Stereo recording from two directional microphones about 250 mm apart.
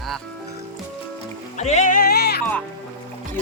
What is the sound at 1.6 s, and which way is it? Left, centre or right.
Music, left.